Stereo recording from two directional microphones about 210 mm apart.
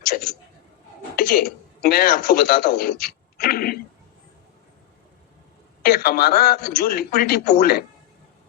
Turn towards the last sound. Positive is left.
turn(degrees=45)  # may be behind; listen again after turning